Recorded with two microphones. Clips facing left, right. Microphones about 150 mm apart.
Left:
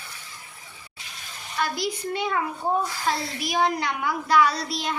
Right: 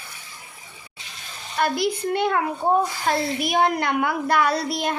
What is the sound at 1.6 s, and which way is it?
A child's voice, 60° right (ahead or behind).